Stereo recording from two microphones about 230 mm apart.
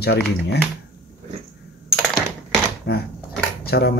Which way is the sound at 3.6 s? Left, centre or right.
Left.